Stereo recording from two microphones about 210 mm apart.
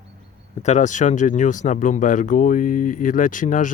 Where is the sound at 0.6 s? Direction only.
35° left (ahead or behind).